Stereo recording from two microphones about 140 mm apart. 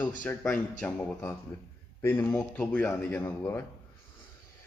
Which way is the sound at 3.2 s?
20° left (ahead or behind).